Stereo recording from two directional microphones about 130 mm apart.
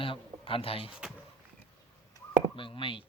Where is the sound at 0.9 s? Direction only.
5° right (ahead or behind).